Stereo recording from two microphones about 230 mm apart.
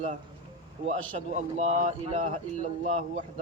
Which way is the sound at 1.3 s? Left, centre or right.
Right.